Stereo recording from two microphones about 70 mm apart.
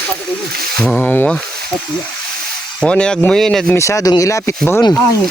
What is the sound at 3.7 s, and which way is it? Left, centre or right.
Speech, left.